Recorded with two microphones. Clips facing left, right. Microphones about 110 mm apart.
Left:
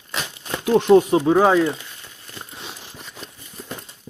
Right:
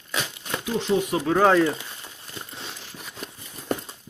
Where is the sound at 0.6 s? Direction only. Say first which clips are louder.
Left 10 dB; 60° left (ahead or behind).